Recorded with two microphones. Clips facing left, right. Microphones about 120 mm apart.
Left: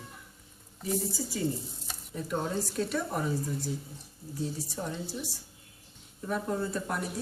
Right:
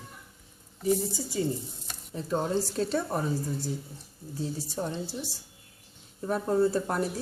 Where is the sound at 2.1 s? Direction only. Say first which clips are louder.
Right 4 dB; 30° right (ahead or behind).